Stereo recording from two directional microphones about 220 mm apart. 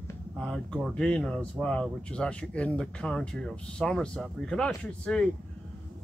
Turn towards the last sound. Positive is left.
turn(degrees=5)  # may be behind; listen again after turning